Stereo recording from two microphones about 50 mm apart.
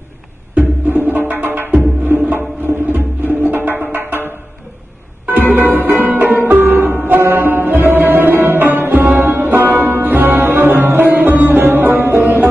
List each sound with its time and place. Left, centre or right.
0.6 s music: right
5.5 s music: right